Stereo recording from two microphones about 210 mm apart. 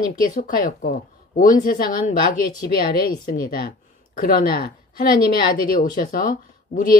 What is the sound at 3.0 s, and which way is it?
Speech, 45° left (ahead or behind).